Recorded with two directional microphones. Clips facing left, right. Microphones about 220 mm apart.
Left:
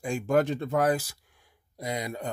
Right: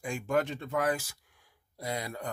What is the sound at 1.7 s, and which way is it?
Speech, 15° left (ahead or behind).